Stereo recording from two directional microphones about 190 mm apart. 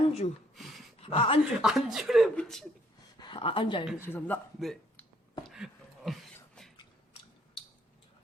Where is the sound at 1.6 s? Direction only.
Centre (ahead or behind).